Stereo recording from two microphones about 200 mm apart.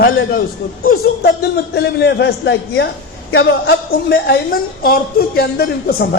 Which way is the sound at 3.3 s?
85° left.